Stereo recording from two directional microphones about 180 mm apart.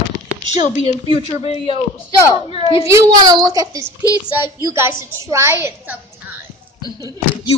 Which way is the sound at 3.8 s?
20° left (ahead or behind).